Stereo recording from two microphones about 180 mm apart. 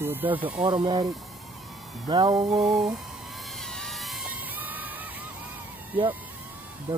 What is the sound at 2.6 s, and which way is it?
Speech, 5° right (ahead or behind).